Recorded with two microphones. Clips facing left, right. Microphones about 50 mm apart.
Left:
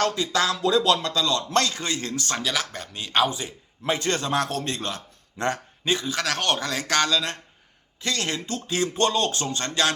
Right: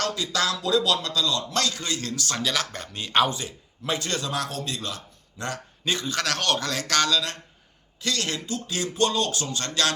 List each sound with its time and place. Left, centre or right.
0.0 s speech: left
0.6 s a man's voice: left
2.4 s speech: centre
3.2 s a man's voice: centre
3.8 s a man's voice: left
5.8 s a man's voice: centre